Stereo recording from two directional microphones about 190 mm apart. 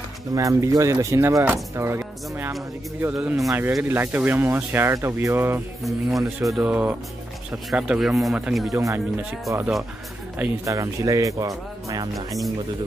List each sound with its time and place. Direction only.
0.3 s speech: 15° right (ahead or behind)
5.9 s speech: centre (ahead or behind)
10.4 s speech: 15° right (ahead or behind)